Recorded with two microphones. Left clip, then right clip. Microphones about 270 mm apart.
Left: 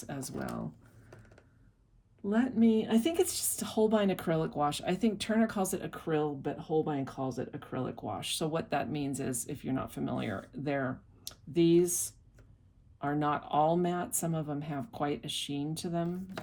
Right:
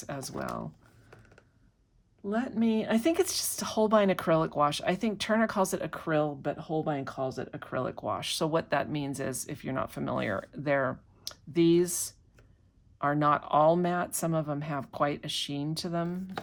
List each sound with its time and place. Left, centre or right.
0.0 s speech: right
2.2 s speech: centre
2.6 s speech: right